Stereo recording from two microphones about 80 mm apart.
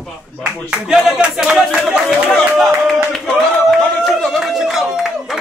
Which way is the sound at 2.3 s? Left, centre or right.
Centre.